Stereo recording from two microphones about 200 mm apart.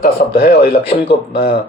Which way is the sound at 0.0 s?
50° left (ahead or behind).